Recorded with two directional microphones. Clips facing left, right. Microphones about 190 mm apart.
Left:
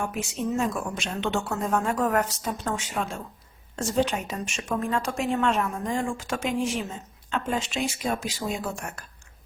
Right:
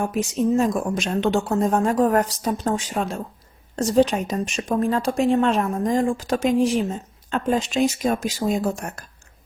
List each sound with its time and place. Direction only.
0.0 s a woman's voice: 35° right (ahead or behind)